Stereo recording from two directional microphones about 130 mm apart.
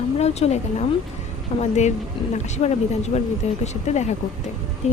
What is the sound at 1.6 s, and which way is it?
Speech, 60° left (ahead or behind).